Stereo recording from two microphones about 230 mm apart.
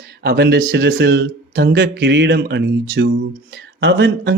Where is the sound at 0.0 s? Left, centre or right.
Right.